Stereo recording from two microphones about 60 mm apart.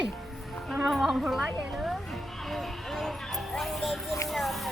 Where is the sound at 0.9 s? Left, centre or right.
Centre.